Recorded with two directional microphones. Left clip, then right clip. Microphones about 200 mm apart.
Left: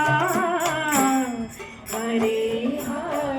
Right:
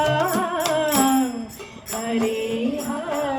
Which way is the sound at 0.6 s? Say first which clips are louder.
Right 2 dB; 45° right (ahead or behind).